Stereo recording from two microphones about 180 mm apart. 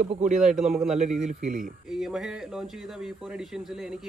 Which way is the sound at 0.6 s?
Centre (ahead or behind).